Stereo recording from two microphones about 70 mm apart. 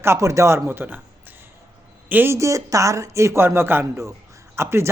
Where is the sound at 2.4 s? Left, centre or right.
Right.